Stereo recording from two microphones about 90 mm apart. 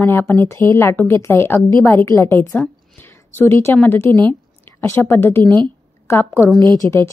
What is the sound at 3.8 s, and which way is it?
A woman's voice, 25° left (ahead or behind).